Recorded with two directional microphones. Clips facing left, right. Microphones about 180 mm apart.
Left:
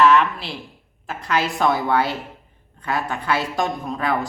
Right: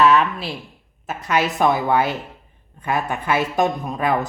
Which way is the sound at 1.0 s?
20° right (ahead or behind).